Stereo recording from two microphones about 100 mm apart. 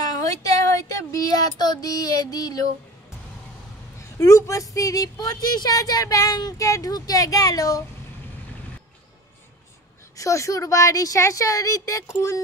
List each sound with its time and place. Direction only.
0.0 s speech: 35° left (ahead or behind)
4.2 s speech: 30° left (ahead or behind)
10.1 s speech: 30° left (ahead or behind)